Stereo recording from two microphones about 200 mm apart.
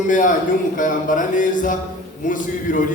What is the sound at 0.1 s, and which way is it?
A man's voice, 40° left (ahead or behind).